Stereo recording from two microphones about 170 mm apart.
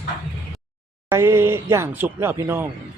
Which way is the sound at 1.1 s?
15° right (ahead or behind).